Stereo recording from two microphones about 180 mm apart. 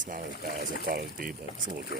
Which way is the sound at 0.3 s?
60° left (ahead or behind).